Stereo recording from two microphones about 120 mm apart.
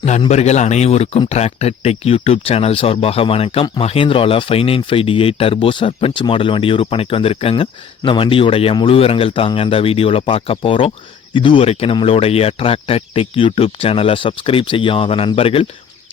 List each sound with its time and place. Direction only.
0.3 s speech: 65° left (ahead or behind); by 15.6 s 50° left (ahead or behind)